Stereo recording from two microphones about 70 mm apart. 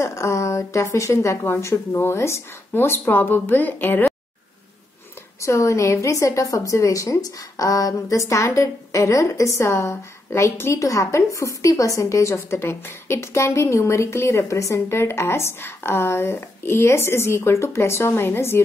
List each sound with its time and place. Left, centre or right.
0.0 s a woman's voice: left
5.4 s a woman's voice: left